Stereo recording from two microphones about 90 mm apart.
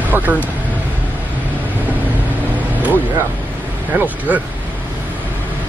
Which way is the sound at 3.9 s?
20° right (ahead or behind).